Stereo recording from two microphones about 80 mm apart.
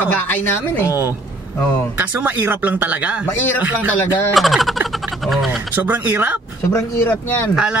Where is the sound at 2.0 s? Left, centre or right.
Right.